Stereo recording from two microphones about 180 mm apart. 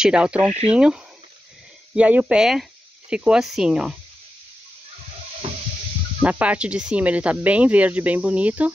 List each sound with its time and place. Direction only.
0.0 s speech: 5° right (ahead or behind)
6.2 s speech: 5° right (ahead or behind)